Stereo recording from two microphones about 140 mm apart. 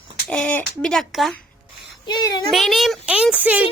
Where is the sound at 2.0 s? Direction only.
30° left (ahead or behind).